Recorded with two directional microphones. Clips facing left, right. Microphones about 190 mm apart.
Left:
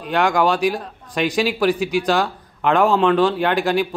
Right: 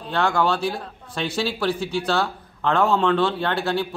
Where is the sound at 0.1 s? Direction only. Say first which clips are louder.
Left 4 dB; 15° left (ahead or behind).